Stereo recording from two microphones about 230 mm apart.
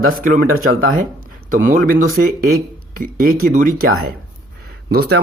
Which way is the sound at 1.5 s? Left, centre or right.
Right.